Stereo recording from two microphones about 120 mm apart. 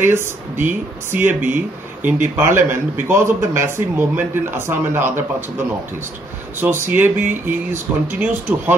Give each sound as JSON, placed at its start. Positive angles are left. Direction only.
{"t": 0.0, "sound": "a man's voice", "side_deg": -20}